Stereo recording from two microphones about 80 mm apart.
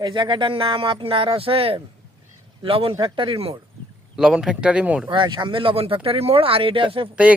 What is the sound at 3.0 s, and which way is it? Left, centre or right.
Speech, right.